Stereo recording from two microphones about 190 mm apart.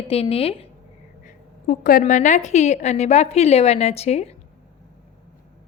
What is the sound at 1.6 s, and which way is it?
A woman's voice, 50° left (ahead or behind).